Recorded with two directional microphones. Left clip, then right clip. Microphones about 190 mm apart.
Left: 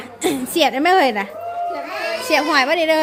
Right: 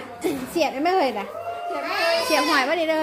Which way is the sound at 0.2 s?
40° left (ahead or behind).